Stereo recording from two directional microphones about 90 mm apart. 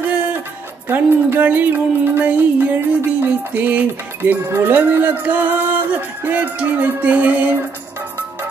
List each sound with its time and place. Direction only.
0.0 s music: 15° right (ahead or behind)
0.8 s speech: 20° right (ahead or behind)